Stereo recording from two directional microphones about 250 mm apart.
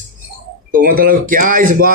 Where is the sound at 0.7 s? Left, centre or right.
Right.